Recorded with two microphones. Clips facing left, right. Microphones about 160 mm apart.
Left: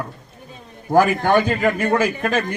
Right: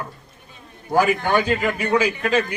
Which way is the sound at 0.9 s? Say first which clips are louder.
Left 3 dB; 55° left (ahead or behind).